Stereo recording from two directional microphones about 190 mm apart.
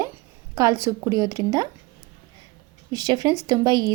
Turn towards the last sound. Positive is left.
turn(degrees=-20)  # may be behind; listen again after turning